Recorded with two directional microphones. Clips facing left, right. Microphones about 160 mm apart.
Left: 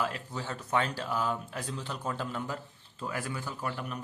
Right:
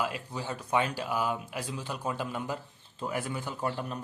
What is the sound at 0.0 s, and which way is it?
A man's voice, 10° right (ahead or behind).